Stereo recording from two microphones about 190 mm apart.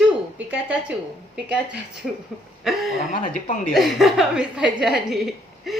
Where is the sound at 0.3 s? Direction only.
5° right (ahead or behind).